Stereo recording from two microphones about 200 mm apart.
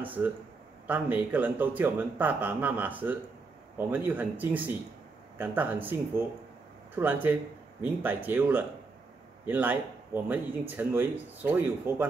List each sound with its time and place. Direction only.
0.0 s a man's voice: 10° right (ahead or behind)